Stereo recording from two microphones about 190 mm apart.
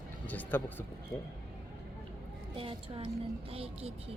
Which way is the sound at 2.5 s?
30° right (ahead or behind).